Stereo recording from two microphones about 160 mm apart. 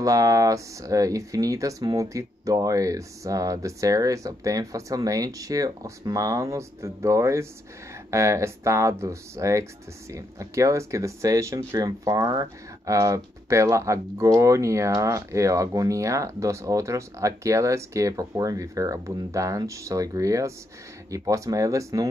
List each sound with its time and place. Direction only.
0.0 s speech: 20° right (ahead or behind)